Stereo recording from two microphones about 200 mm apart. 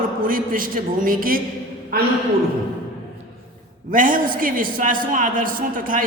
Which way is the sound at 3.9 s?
40° right (ahead or behind).